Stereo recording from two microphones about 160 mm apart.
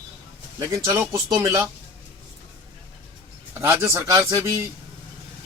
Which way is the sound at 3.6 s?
15° right (ahead or behind).